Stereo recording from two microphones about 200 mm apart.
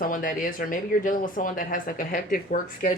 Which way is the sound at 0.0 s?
45° left (ahead or behind).